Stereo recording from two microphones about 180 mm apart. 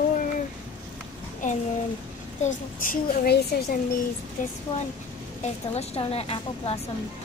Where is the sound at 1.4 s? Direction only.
45° left (ahead or behind).